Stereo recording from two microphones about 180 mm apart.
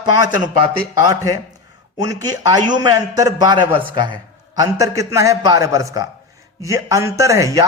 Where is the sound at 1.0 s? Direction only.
20° right (ahead or behind).